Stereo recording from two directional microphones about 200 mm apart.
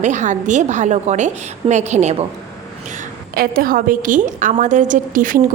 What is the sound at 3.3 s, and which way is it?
A woman's voice, 50° right (ahead or behind).